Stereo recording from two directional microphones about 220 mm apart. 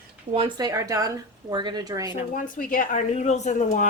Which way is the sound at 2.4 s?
35° left (ahead or behind).